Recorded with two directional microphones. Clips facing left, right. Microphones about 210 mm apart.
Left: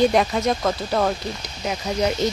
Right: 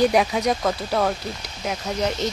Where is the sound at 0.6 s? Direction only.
Centre (ahead or behind).